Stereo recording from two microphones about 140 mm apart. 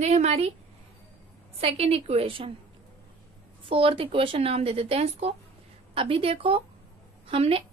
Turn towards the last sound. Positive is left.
turn(degrees=-40)  # may be behind; listen again after turning